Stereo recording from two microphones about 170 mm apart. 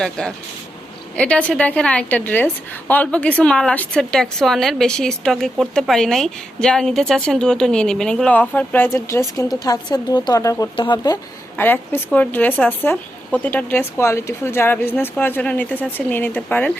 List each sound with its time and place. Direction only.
0.0 s a woman's voice: 5° left (ahead or behind); by 11.2 s 25° left (ahead or behind)
11.5 s speech: 10° left (ahead or behind)